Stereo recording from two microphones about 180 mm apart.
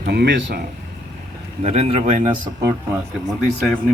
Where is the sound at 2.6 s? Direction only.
15° right (ahead or behind).